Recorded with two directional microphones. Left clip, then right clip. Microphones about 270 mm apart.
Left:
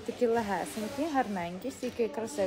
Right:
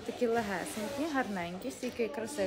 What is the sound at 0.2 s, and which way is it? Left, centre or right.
A woman's voice, centre.